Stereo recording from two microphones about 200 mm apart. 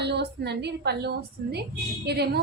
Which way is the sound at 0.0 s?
55° right (ahead or behind).